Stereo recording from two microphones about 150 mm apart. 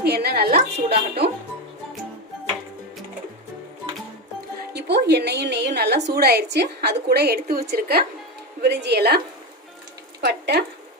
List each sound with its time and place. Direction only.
0.0 s a woman's voice: 90° right
4.7 s a woman's voice: 90° right